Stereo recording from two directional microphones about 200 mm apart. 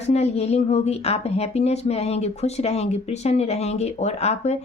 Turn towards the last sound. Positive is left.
turn(degrees=30)  # may be behind; listen again after turning